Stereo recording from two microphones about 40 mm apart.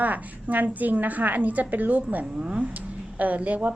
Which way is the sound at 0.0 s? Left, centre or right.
Right.